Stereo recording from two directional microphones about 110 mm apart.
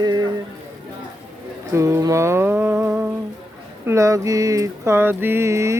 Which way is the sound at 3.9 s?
30° right (ahead or behind).